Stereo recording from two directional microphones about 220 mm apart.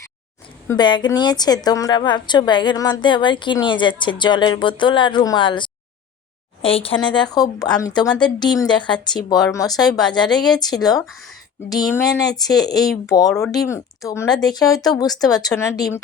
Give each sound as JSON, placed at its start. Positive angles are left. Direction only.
{"t": 0.7, "sound": "a woman's voice", "side_deg": 20}
{"t": 10.3, "sound": "a woman's voice", "side_deg": 5}
{"t": 10.6, "sound": "speech", "side_deg": 15}
{"t": 12.7, "sound": "a woman's voice", "side_deg": 0}
{"t": 13.1, "sound": "speech", "side_deg": 15}